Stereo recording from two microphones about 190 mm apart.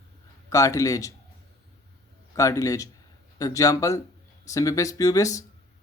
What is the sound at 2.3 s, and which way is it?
Speech, 15° left (ahead or behind).